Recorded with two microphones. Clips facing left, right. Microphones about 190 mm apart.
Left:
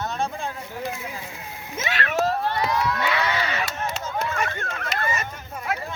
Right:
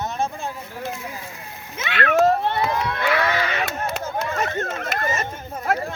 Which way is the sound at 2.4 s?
25° right (ahead or behind).